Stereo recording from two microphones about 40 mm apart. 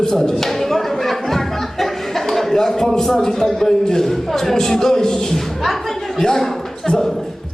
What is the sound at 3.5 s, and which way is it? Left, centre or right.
Speech, centre.